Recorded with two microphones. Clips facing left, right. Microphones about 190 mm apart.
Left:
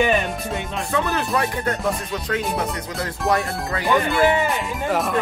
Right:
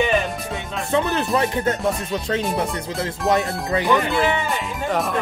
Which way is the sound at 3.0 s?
20° right (ahead or behind).